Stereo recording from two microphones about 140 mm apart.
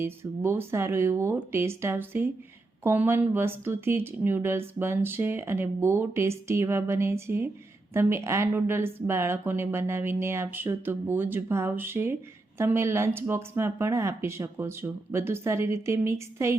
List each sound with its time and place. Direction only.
0.0 s speech: 15° right (ahead or behind)